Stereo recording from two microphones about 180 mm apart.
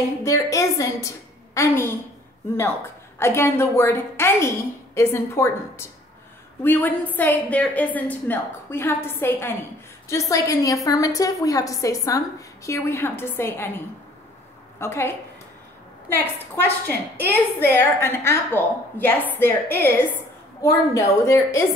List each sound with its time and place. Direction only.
0.2 s a woman's voice: 15° left (ahead or behind)
3.2 s a woman's voice: 15° left (ahead or behind)